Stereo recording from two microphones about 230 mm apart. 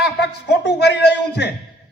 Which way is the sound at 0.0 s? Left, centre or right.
Left.